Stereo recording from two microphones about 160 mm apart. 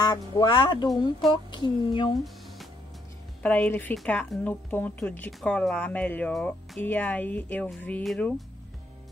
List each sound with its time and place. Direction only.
0.0 s speech: 25° left (ahead or behind)
3.4 s a woman's voice: 10° left (ahead or behind)